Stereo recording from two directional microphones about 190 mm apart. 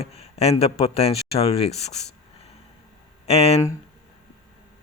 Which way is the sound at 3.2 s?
35° left (ahead or behind).